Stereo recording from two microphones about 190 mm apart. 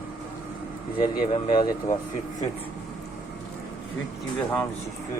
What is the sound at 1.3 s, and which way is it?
Speech, 25° left (ahead or behind).